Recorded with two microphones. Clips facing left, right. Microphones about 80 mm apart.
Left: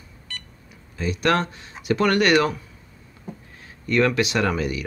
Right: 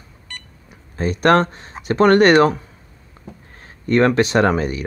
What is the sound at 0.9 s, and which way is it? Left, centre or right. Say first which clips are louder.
Speech: right 7 dB; right.